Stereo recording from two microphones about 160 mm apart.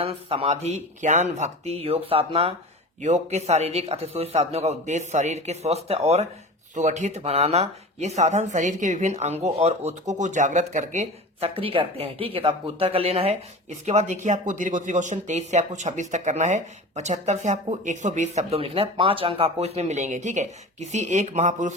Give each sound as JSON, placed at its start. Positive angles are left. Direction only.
{"t": 0.0, "sound": "a man's voice", "side_deg": -35}